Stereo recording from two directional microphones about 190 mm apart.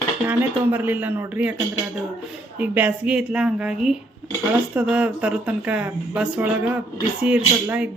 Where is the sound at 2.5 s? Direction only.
10° right (ahead or behind).